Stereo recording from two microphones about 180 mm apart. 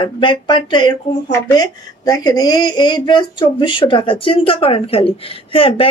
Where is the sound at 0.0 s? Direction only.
25° left (ahead or behind).